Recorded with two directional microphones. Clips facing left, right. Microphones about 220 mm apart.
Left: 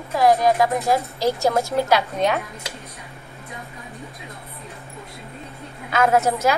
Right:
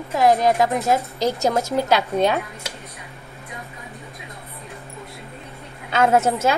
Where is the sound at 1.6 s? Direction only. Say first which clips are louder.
Even; 25° right (ahead or behind).